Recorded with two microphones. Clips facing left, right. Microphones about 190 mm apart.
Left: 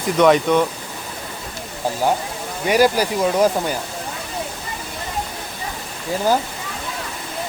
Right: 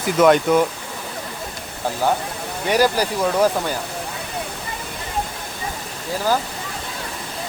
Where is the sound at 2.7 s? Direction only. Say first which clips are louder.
Left 2 dB; 10° left (ahead or behind).